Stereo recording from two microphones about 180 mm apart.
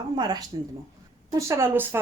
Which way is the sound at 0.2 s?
25° right (ahead or behind).